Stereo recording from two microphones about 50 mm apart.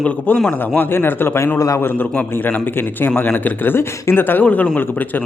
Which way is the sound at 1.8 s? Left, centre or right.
Left.